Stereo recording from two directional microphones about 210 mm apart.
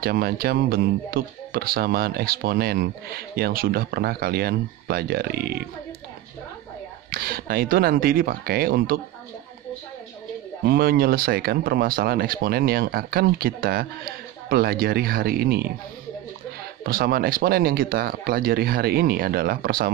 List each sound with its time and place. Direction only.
0.0 s speech: 45° right (ahead or behind)
7.1 s speech: 45° right (ahead or behind)
10.6 s speech: 45° right (ahead or behind)
16.8 s speech: 45° right (ahead or behind)